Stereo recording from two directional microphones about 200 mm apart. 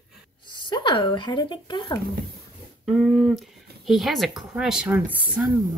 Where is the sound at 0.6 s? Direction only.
20° left (ahead or behind).